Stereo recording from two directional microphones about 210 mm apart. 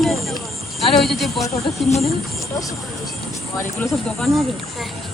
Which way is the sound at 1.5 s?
30° left (ahead or behind).